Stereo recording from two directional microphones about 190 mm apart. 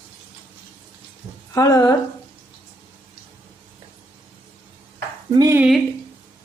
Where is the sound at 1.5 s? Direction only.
20° left (ahead or behind).